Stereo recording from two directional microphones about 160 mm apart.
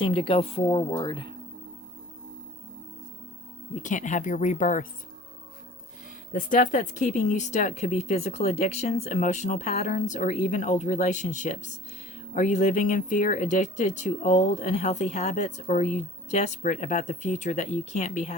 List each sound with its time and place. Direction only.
0.0 s speech: 35° left (ahead or behind)
3.8 s speech: 50° left (ahead or behind)
6.3 s speech: 55° left (ahead or behind)